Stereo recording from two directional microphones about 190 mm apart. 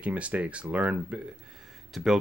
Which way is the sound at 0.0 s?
5° right (ahead or behind).